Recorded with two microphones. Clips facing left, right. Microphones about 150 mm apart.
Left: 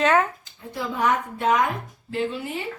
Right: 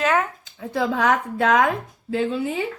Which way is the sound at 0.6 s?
90° right.